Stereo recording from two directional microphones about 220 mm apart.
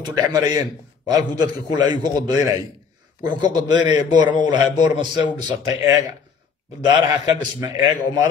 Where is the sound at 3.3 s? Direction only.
20° right (ahead or behind).